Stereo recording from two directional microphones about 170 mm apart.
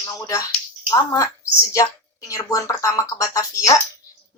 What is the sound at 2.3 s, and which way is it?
A woman's voice, 20° left (ahead or behind).